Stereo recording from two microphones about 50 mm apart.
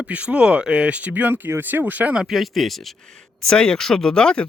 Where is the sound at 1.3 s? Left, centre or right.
Right.